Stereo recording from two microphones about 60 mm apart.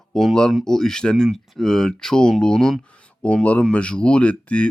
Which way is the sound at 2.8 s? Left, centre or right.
Left.